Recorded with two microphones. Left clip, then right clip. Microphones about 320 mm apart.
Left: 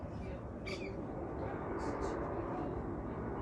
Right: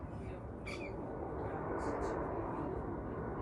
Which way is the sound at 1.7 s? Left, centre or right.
Centre.